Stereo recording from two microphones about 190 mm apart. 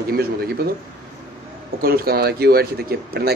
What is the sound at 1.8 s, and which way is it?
Speech, 55° right (ahead or behind).